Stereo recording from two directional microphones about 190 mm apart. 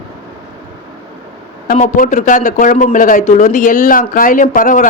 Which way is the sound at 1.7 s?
45° left (ahead or behind).